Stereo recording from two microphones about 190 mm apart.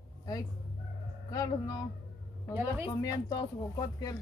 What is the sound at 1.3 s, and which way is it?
Speech, 20° left (ahead or behind).